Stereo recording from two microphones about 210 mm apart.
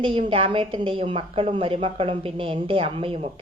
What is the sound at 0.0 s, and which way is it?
A woman's voice, 25° right (ahead or behind).